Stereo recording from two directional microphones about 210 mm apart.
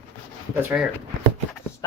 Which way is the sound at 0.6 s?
10° right (ahead or behind).